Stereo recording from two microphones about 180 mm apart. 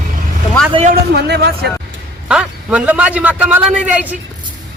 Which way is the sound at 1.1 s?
65° right (ahead or behind).